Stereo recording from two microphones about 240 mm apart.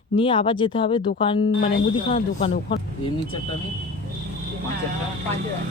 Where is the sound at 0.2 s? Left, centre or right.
Left.